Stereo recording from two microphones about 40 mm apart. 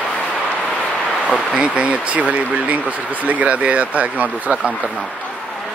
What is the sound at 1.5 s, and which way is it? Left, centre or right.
Speech, right.